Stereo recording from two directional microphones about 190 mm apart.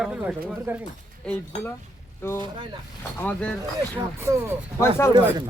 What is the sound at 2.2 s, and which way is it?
Speech, 15° left (ahead or behind).